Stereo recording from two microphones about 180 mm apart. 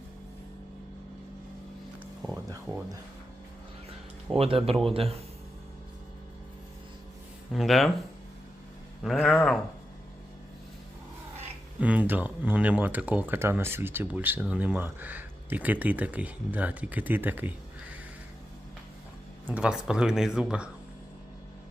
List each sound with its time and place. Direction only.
4.4 s speech: 30° right (ahead or behind)
7.5 s speech: centre (ahead or behind)
9.0 s speech: centre (ahead or behind)
11.8 s speech: 10° right (ahead or behind)
19.5 s speech: 5° right (ahead or behind)